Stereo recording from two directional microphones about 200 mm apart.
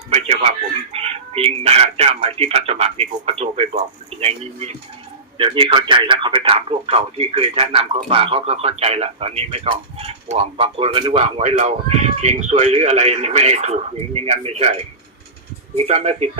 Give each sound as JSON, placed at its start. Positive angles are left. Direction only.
{"t": 0.1, "sound": "chicken", "side_deg": -30}
{"t": 0.9, "sound": "speech", "side_deg": -30}